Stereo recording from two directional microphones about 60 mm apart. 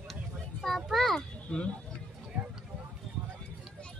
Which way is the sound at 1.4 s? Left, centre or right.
Centre.